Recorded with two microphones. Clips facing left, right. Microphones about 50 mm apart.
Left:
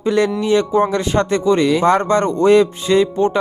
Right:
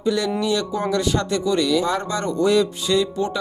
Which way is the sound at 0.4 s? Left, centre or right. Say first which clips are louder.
Left 7 dB; left.